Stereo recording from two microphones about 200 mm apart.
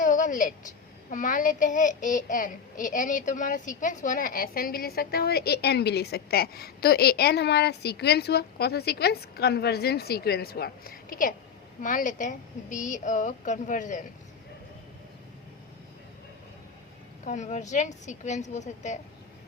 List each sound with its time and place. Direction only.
0.0 s a sound: 40° left (ahead or behind)
1.1 s a child's voice: 40° left (ahead or behind)
17.2 s a woman's voice: 35° left (ahead or behind)